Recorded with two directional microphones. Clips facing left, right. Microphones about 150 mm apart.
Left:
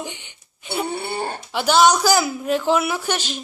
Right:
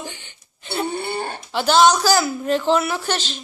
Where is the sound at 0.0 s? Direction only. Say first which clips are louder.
Left 2 dB; 15° left (ahead or behind).